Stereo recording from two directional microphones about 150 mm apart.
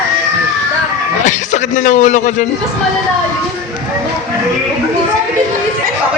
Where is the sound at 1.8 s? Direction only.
55° left (ahead or behind).